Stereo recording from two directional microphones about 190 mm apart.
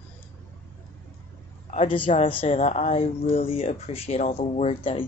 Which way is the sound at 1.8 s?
25° left (ahead or behind).